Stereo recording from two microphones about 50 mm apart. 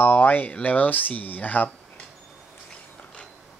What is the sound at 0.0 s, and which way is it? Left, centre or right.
Speech, left.